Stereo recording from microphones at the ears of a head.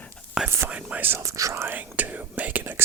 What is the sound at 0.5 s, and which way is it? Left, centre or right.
Speech, right.